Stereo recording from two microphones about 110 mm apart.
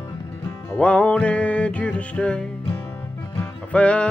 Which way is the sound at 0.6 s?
10° left (ahead or behind).